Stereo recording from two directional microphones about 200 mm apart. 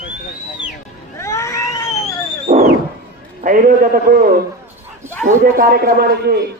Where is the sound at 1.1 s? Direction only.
15° left (ahead or behind).